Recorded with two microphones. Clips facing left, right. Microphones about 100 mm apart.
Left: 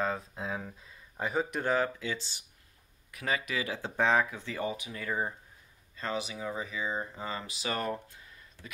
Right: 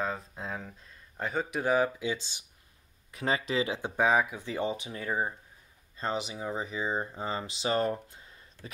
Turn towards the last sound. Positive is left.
turn(degrees=-30)  # may be behind; listen again after turning